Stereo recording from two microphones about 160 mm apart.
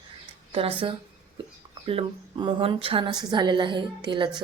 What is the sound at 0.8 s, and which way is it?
A woman's voice, 35° right (ahead or behind).